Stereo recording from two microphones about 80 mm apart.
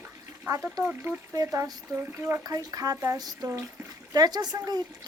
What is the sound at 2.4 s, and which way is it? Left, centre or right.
Speech, right.